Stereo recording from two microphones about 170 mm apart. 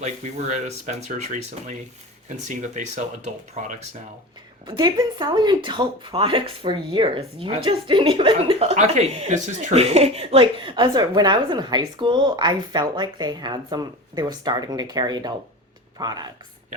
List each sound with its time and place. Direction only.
0.0 s speech: 40° right (ahead or behind)
4.6 s speech: 25° right (ahead or behind)